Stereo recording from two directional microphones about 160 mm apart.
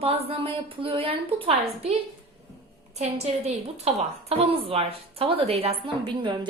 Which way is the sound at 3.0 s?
45° right (ahead or behind).